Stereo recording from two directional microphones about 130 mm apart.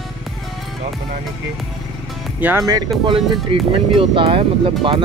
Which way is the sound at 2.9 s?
Centre (ahead or behind).